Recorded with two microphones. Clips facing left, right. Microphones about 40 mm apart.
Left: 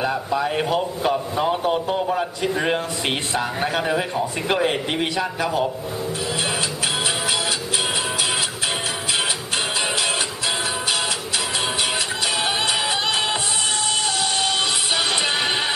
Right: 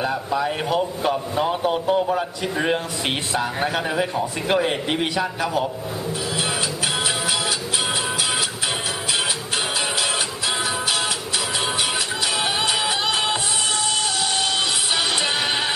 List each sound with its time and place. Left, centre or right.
0.0 s a man's voice: centre
12.4 s music: centre